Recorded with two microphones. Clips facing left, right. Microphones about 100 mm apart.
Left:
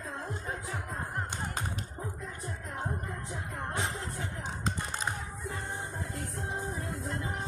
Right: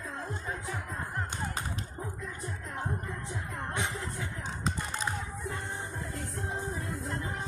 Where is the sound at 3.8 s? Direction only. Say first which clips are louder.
Right 1 dB; 35° left (ahead or behind).